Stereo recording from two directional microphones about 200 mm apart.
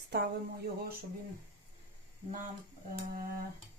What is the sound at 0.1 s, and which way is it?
Speech, 55° right (ahead or behind).